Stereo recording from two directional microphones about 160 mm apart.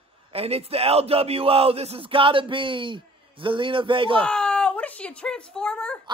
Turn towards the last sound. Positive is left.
turn(degrees=5)  # may be behind; listen again after turning